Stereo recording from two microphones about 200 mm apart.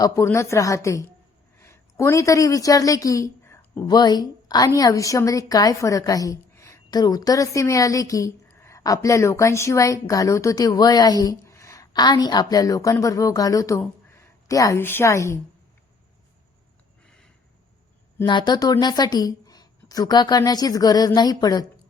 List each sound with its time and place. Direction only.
0.0 s a woman's voice: 15° left (ahead or behind)
18.3 s speech: 20° left (ahead or behind)